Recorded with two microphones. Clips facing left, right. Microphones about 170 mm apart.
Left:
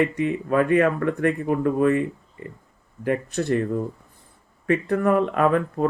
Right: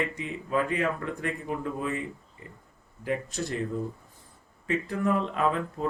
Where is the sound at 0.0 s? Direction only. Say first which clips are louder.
Left 10 dB; 60° left (ahead or behind).